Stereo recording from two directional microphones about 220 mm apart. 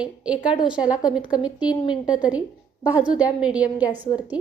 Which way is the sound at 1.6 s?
20° left (ahead or behind).